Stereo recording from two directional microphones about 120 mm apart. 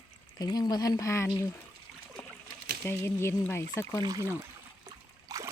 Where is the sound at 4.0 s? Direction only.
30° right (ahead or behind).